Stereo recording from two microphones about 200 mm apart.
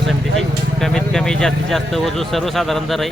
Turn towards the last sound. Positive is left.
turn(degrees=0)  # may be behind; listen again after turning